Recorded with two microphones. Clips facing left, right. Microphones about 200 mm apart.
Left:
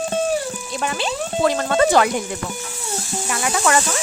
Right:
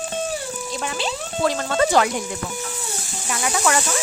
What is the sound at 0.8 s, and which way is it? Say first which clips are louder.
Music: left 4 dB; 55° left (ahead or behind).